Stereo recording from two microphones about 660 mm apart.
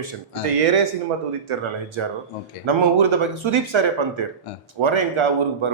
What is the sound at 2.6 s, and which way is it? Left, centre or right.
A man's voice, right.